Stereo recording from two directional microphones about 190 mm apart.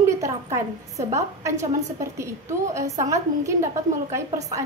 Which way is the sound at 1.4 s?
15° right (ahead or behind).